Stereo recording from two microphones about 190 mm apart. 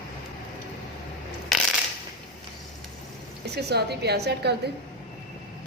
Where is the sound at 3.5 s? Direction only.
60° right (ahead or behind).